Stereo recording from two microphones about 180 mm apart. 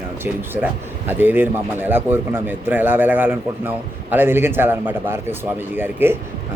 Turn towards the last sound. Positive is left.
turn(degrees=-10)  # may be behind; listen again after turning